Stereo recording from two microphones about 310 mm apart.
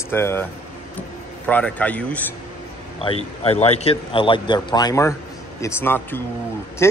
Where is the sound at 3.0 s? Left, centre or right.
Centre.